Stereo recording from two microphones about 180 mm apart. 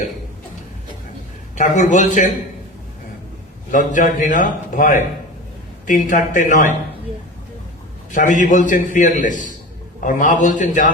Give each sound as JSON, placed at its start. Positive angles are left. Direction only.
{"t": 1.5, "sound": "a man's voice", "side_deg": 45}
{"t": 3.7, "sound": "a man's voice", "side_deg": 45}
{"t": 8.1, "sound": "a man's voice", "side_deg": 45}